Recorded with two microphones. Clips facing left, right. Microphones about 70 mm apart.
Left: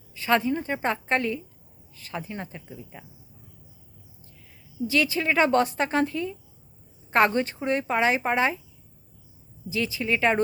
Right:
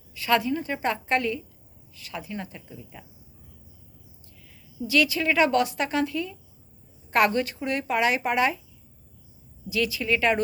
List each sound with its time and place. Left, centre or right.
0.1 s a woman's voice: left
4.9 s a woman's voice: left
9.6 s speech: left